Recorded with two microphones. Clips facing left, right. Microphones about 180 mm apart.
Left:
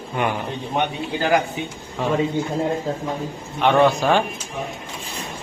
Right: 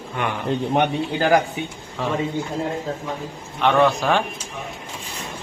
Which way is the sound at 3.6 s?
5° left (ahead or behind).